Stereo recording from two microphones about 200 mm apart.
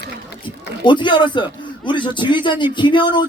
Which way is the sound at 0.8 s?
25° left (ahead or behind).